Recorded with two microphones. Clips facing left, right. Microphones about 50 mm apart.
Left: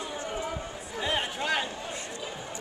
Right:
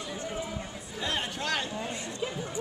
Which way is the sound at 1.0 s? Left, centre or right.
Centre.